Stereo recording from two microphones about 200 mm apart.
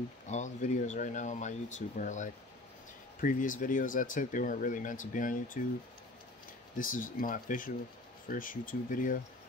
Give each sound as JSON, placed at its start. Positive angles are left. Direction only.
{"t": 0.3, "sound": "speech", "side_deg": 40}
{"t": 6.8, "sound": "speech", "side_deg": 40}